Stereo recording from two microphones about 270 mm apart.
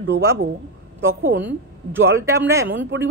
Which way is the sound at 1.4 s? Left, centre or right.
Centre.